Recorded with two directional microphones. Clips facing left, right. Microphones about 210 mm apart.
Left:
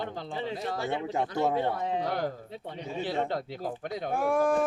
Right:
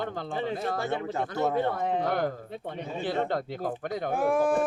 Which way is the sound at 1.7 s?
55° right (ahead or behind).